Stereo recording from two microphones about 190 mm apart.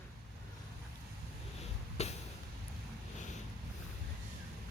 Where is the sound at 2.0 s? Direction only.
35° left (ahead or behind).